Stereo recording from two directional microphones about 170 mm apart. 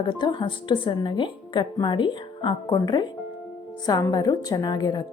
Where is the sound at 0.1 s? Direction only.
25° left (ahead or behind).